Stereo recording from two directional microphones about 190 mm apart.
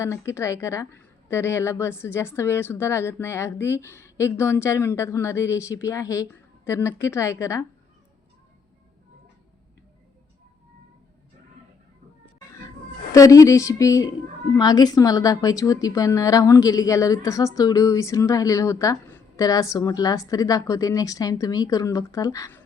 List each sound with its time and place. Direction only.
0.0 s a woman's voice: 15° left (ahead or behind)
13.1 s a woman's voice: 15° left (ahead or behind)